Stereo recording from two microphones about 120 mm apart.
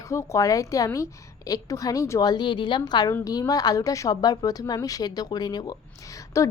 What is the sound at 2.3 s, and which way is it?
A woman's voice, 40° left (ahead or behind).